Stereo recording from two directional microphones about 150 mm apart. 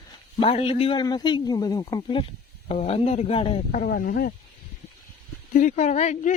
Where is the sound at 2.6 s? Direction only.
40° left (ahead or behind).